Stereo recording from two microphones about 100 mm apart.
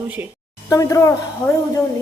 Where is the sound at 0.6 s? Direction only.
35° left (ahead or behind).